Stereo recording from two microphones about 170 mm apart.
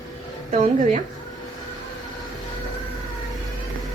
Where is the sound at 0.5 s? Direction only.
45° right (ahead or behind).